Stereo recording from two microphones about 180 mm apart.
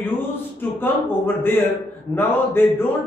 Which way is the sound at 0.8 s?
10° left (ahead or behind).